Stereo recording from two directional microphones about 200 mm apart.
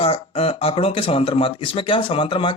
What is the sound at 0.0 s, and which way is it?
Speech, 30° left (ahead or behind).